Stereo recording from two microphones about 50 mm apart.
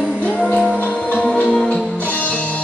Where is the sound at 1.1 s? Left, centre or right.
Left.